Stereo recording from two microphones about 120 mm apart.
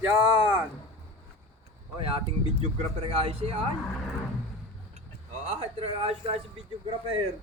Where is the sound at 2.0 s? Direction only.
50° right (ahead or behind).